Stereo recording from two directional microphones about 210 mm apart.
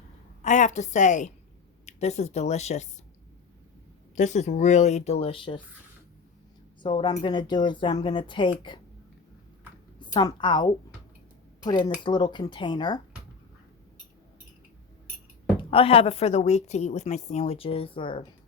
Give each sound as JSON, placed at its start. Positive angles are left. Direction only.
{"t": 0.4, "sound": "speech", "side_deg": 35}
{"t": 4.1, "sound": "speech", "side_deg": 35}
{"t": 6.8, "sound": "speech", "side_deg": 25}
{"t": 10.0, "sound": "a woman's voice", "side_deg": 20}
{"t": 15.5, "sound": "speech", "side_deg": 25}